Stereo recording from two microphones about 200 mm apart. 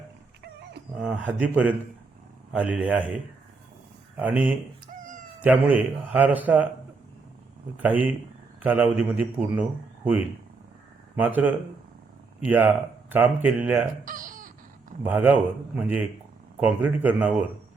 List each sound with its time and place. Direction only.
0.9 s a man's voice: 5° right (ahead or behind)
4.2 s a man's voice: 10° right (ahead or behind)
7.8 s a man's voice: 10° right (ahead or behind)
14.0 s a sound: 45° right (ahead or behind)
15.0 s a man's voice: 10° right (ahead or behind)